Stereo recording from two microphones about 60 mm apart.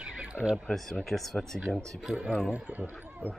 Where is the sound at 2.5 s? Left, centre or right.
Right.